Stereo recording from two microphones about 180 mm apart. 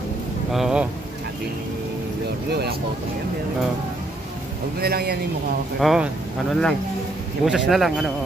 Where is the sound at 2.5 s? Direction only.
65° right (ahead or behind).